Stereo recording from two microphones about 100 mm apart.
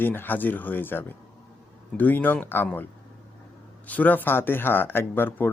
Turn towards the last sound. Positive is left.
turn(degrees=20)  # may be behind; listen again after turning